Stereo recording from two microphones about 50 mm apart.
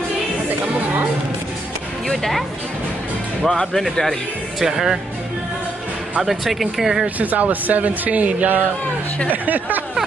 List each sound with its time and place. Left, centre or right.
2.0 s speech: centre
3.4 s speech: centre
4.6 s speech: centre
6.2 s speech: centre
7.2 s speech: right